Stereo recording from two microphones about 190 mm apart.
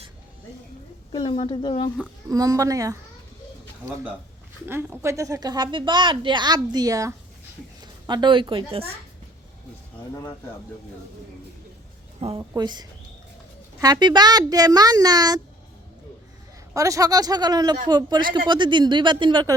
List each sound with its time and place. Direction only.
1.1 s speech: 25° left (ahead or behind)
2.3 s speech: 20° right (ahead or behind)
4.6 s a woman's voice: 10° right (ahead or behind); by 8.8 s 25° right (ahead or behind)
12.4 s a woman's voice: 20° right (ahead or behind)
16.7 s a woman's voice: 15° right (ahead or behind)